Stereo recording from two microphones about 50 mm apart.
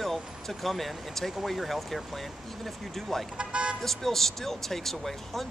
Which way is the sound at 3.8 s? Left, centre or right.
Centre.